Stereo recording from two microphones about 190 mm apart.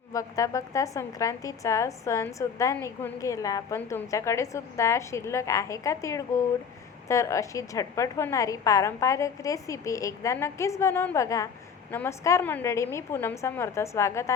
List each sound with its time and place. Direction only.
0.1 s a woman's voice: 15° left (ahead or behind)